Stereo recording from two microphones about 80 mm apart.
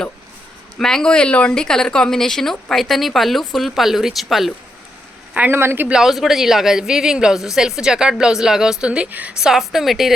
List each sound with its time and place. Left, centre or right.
0.8 s speech: centre
5.5 s speech: right
5.9 s speech: centre
9.4 s speech: centre